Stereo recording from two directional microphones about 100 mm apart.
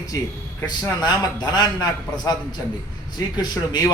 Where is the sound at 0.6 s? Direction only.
45° left (ahead or behind).